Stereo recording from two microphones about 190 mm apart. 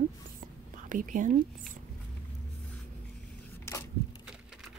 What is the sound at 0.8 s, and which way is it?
Speech, 45° right (ahead or behind).